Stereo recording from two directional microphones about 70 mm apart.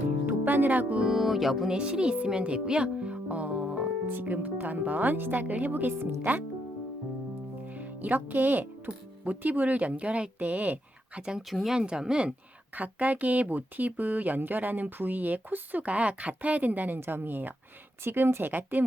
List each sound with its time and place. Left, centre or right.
0.3 s speech: right
1.1 s speech: centre; by 6.4 s right
7.6 s music: right
8.9 s speech: right
12.7 s speech: right